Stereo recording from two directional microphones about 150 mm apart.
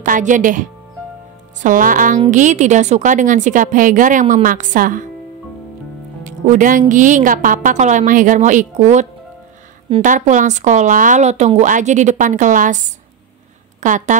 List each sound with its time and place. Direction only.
0.0 s speech: 60° right (ahead or behind)
6.2 s music: 55° right (ahead or behind)
6.9 s speech: 60° right (ahead or behind)
10.0 s a woman's voice: 55° right (ahead or behind)